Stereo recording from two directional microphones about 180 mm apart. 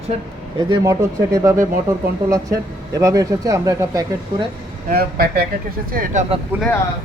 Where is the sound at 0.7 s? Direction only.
20° right (ahead or behind).